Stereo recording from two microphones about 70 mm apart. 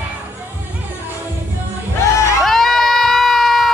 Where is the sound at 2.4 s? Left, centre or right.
Centre.